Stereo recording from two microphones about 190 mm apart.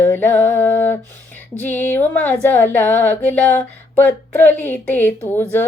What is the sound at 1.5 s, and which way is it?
Speech, 10° left (ahead or behind).